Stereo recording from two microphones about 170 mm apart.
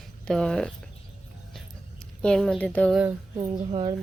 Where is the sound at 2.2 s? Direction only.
5° left (ahead or behind).